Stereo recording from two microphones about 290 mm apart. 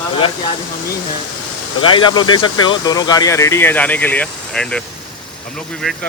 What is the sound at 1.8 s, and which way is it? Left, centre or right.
Speech, centre.